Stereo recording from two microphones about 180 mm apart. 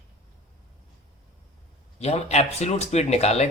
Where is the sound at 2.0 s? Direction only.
35° left (ahead or behind).